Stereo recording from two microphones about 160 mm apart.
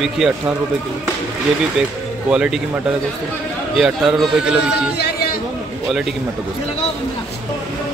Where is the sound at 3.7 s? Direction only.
5° right (ahead or behind).